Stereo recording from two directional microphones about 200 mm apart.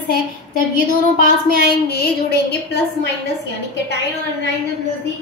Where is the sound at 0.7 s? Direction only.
45° left (ahead or behind).